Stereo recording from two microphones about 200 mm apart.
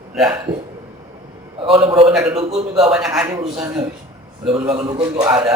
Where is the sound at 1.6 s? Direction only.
25° right (ahead or behind).